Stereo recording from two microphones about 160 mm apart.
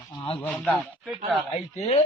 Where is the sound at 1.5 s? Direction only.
45° left (ahead or behind).